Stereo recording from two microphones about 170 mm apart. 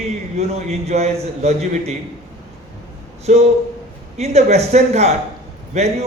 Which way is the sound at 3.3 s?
40° right (ahead or behind).